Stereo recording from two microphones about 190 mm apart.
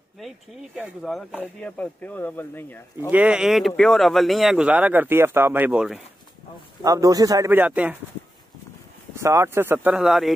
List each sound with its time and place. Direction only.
0.2 s speech: centre (ahead or behind)
1.6 s speech: 5° left (ahead or behind)
3.1 s speech: 5° right (ahead or behind)
6.8 s a man's voice: 20° right (ahead or behind)
9.1 s a man's voice: 15° right (ahead or behind)